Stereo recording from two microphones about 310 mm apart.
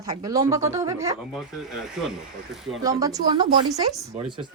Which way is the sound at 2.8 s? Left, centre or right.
Centre.